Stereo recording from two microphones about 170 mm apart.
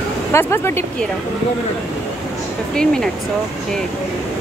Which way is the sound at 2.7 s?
5° left (ahead or behind).